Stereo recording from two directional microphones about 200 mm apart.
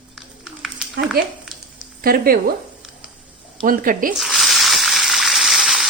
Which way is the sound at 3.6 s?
45° right (ahead or behind).